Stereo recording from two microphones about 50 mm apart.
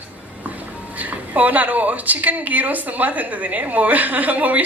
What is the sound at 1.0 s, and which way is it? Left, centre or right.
A woman's voice, right.